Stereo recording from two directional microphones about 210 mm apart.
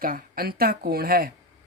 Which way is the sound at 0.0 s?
45° right (ahead or behind).